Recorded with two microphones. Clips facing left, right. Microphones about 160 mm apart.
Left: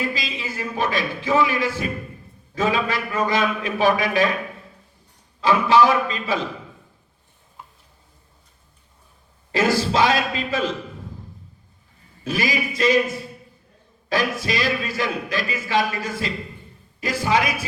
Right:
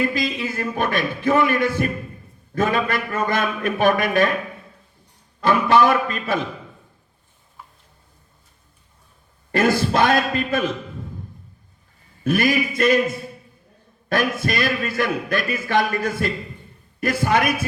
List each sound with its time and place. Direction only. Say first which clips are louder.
0.1 s a man's voice: right 6 dB; 55° right (ahead or behind)
5.4 s a man's voice: even; 55° right (ahead or behind)
9.5 s a man's voice: right 1 dB; 55° right (ahead or behind)
12.2 s a sound: right 5 dB; 55° right (ahead or behind)
14.1 s a man's voice: right 1 dB; 55° right (ahead or behind)